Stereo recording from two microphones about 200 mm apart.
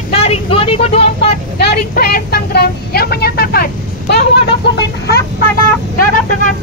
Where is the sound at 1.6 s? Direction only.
55° left (ahead or behind).